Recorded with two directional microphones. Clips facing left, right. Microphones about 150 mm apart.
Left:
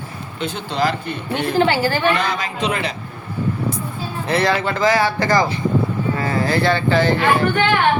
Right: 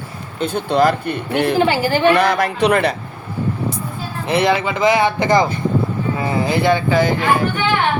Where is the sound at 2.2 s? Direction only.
70° right (ahead or behind).